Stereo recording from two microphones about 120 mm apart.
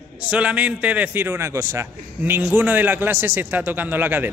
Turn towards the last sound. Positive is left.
turn(degrees=-15)  # may be behind; listen again after turning